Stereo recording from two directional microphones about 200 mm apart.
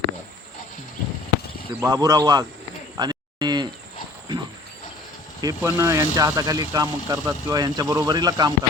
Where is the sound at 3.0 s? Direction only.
20° right (ahead or behind).